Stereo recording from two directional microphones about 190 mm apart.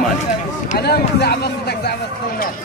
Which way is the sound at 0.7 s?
60° left (ahead or behind).